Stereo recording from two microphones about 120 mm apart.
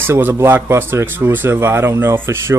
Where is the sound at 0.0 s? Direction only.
20° right (ahead or behind).